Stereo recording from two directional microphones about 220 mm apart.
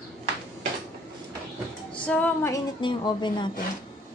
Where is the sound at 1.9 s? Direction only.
5° left (ahead or behind).